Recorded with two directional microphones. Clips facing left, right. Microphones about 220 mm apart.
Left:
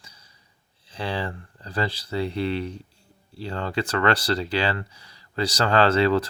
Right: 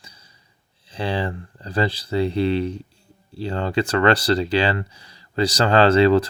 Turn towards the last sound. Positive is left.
turn(degrees=-20)  # may be behind; listen again after turning